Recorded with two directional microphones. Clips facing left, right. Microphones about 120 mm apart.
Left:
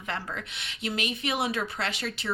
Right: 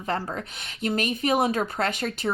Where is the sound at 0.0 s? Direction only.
35° right (ahead or behind).